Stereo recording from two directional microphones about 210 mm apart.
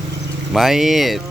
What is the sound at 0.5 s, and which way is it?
Speech, centre (ahead or behind).